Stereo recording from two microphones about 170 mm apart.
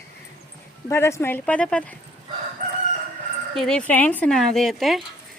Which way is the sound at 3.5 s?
5° left (ahead or behind).